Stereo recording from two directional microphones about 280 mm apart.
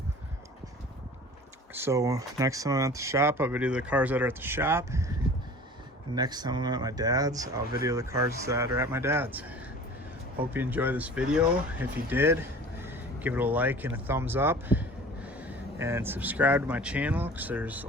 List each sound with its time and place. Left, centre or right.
1.7 s speech: centre
6.1 s speech: centre